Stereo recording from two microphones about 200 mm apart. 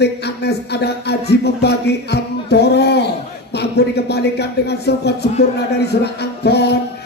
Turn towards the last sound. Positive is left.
turn(degrees=55)  # may be behind; listen again after turning